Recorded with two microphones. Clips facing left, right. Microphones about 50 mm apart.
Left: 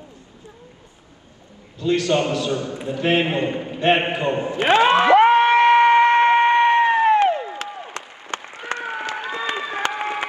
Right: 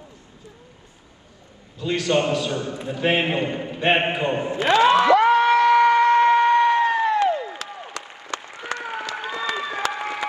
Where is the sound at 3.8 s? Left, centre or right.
Centre.